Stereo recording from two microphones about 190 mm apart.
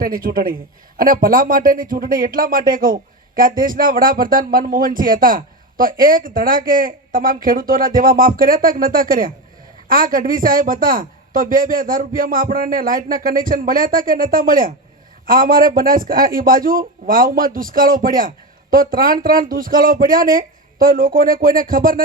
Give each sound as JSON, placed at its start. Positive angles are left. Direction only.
{"t": 0.0, "sound": "speech", "side_deg": -50}